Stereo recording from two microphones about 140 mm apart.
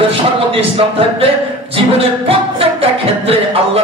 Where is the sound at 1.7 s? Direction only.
45° right (ahead or behind).